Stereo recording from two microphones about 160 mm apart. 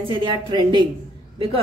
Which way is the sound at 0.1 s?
30° right (ahead or behind).